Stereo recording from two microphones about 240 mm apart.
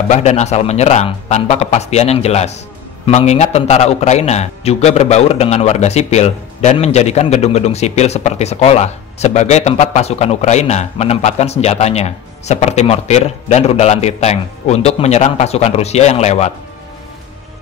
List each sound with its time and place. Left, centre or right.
0.1 s a man's voice: left